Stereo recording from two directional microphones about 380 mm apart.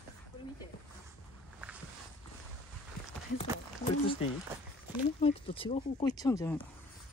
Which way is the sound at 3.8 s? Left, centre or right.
Centre.